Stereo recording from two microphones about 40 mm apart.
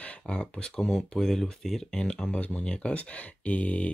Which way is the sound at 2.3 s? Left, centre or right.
Left.